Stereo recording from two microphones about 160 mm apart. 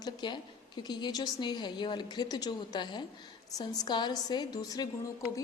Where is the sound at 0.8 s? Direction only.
25° left (ahead or behind).